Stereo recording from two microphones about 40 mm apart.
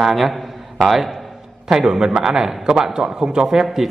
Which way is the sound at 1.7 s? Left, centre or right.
Centre.